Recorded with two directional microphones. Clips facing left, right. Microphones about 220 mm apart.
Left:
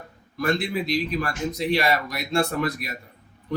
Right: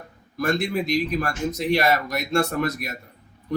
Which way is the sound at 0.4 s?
45° right (ahead or behind).